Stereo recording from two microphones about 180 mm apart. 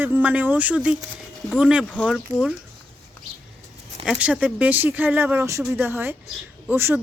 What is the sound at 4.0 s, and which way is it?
Speech, 5° right (ahead or behind).